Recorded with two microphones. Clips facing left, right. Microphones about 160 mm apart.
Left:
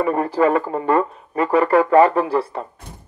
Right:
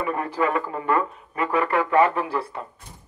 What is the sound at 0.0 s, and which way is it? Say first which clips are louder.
Speech: left 7 dB; 35° left (ahead or behind).